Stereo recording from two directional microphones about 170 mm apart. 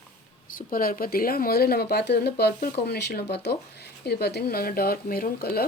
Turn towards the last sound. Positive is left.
turn(degrees=65)  # may be behind; listen again after turning